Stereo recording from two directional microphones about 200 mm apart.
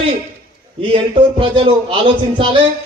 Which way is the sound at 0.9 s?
25° right (ahead or behind).